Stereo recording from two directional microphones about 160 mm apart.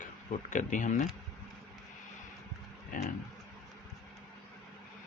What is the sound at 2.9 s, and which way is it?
Speech, 60° left (ahead or behind).